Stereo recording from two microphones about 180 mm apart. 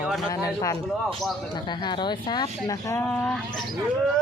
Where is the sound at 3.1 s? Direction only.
5° left (ahead or behind).